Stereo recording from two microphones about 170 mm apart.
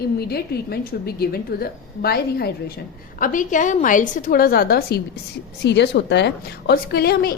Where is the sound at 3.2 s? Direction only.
50° left (ahead or behind).